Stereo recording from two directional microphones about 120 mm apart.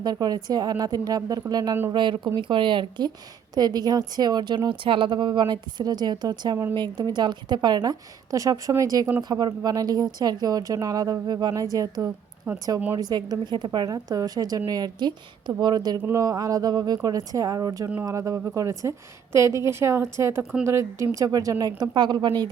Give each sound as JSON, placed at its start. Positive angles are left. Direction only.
{"t": 0.0, "sound": "a woman's voice", "side_deg": -35}
{"t": 13.0, "sound": "a woman's voice", "side_deg": -35}